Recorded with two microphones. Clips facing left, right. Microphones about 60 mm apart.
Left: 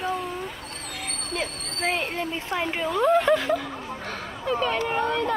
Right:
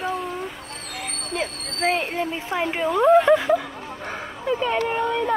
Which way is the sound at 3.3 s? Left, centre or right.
Centre.